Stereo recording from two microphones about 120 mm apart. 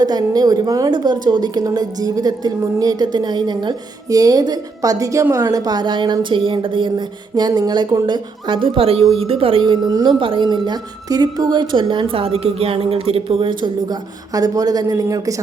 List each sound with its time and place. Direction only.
0.0 s a woman's voice: 35° right (ahead or behind)